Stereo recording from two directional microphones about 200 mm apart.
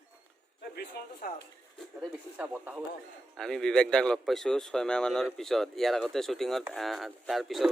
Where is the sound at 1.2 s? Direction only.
45° left (ahead or behind).